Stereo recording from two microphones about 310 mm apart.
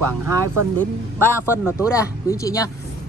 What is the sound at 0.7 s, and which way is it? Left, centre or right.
Speech, centre.